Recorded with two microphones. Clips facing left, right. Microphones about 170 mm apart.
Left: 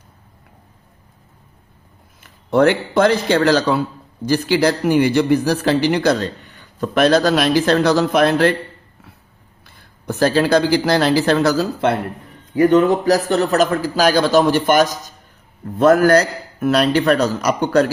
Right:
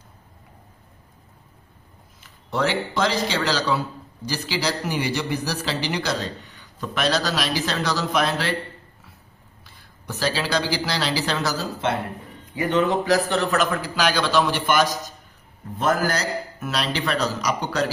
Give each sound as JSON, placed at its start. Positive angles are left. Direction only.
{"t": 2.5, "sound": "a man's voice", "side_deg": 55}
{"t": 9.6, "sound": "a man's voice", "side_deg": 50}
{"t": 12.5, "sound": "a man's voice", "side_deg": 45}
{"t": 15.8, "sound": "a man's voice", "side_deg": 65}